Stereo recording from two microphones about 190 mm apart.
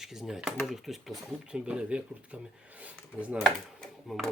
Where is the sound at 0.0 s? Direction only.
Centre (ahead or behind).